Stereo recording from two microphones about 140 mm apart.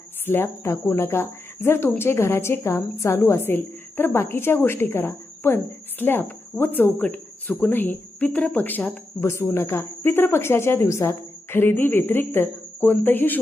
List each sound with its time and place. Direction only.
0.3 s speech: 15° left (ahead or behind)